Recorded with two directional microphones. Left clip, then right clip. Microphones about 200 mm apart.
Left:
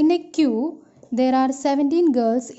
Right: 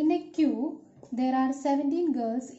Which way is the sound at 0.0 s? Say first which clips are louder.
Left 7 dB; 50° left (ahead or behind).